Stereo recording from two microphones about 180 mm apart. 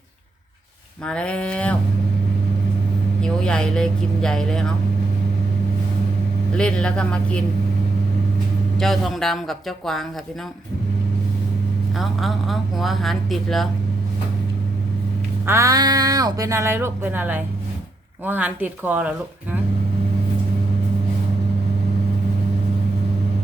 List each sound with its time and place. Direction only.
1.0 s speech: 5° left (ahead or behind)
3.2 s speech: 5° left (ahead or behind)
6.5 s speech: 5° left (ahead or behind)
8.8 s speech: centre (ahead or behind)
11.9 s speech: centre (ahead or behind)
15.4 s speech: 15° right (ahead or behind)